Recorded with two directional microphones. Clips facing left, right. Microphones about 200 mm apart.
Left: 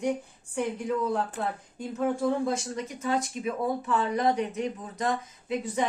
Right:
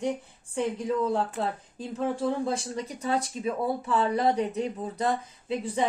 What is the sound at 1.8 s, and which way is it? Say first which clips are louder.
Speech: left 2 dB; 30° right (ahead or behind).